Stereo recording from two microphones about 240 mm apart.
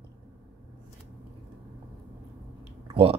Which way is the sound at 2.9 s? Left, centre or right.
Right.